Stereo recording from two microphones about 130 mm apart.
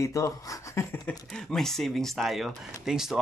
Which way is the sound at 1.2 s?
Centre (ahead or behind).